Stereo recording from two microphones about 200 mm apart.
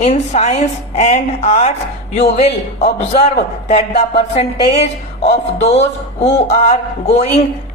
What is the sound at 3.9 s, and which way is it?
Speech, 30° left (ahead or behind).